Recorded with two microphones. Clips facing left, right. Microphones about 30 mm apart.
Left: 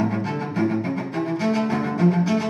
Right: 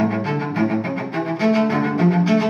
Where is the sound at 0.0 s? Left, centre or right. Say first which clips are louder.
Right 4 dB; centre.